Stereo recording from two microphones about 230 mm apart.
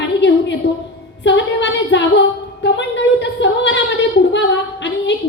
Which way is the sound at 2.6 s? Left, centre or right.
Left.